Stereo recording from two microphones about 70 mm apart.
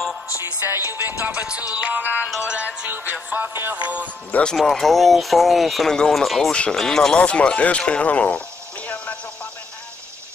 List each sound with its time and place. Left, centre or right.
0.4 s music: right
1.2 s music: right
4.3 s speech: centre
4.6 s speech: centre
6.5 s speech: centre
7.2 s a sound: centre